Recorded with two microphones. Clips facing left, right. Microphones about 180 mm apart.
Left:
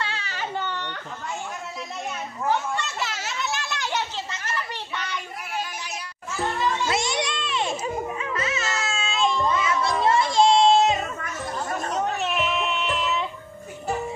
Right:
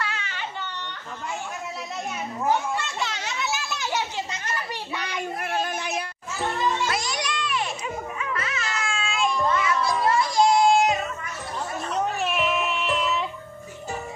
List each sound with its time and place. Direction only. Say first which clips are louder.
0.0 s baby cry: left 1 dB; 35° left (ahead or behind)
2.4 s a child's voice: right 1 dB; 15° right (ahead or behind)
2.8 s children playing: even; 5° left (ahead or behind)
4.3 s a child's voice: even; 15° right (ahead or behind)
5.4 s child singing: right 6 dB; 55° right (ahead or behind)
6.9 s a sound: left 3 dB; 25° left (ahead or behind)
7.8 s music: left 3 dB; 25° left (ahead or behind)
10.0 s child singing: left 2 dB; 25° left (ahead or behind)
12.0 s a sound: right 2 dB; centre (ahead or behind)